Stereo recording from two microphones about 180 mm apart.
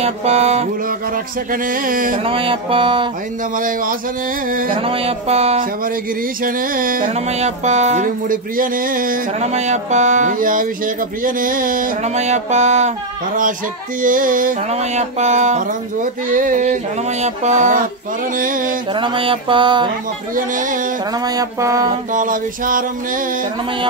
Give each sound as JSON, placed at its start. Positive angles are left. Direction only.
{"t": 0.0, "sound": "a sound", "side_deg": -35}
{"t": 1.5, "sound": "music", "side_deg": -50}
{"t": 2.2, "sound": "mantra", "side_deg": -30}
{"t": 3.5, "sound": "music", "side_deg": -50}
{"t": 4.8, "sound": "a sound", "side_deg": -30}
{"t": 6.4, "sound": "music", "side_deg": -50}
{"t": 11.2, "sound": "a sound", "side_deg": -50}
{"t": 14.0, "sound": "music", "side_deg": -50}
{"t": 17.2, "sound": "a sound", "side_deg": -40}
{"t": 18.4, "sound": "music", "side_deg": -50}
{"t": 18.9, "sound": "mantra", "side_deg": -30}
{"t": 20.3, "sound": "music", "side_deg": -45}
{"t": 21.4, "sound": "mantra", "side_deg": -20}
{"t": 22.1, "sound": "music", "side_deg": -50}